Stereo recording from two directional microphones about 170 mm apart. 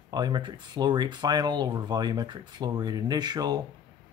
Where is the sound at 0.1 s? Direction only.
25° right (ahead or behind).